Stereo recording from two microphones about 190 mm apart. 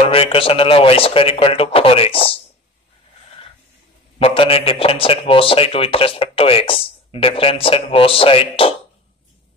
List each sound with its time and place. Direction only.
0.1 s a man's voice: 30° left (ahead or behind)
4.2 s a man's voice: 30° left (ahead or behind)